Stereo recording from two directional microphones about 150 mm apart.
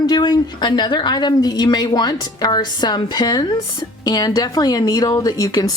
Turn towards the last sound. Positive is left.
turn(degrees=25)  # may be behind; listen again after turning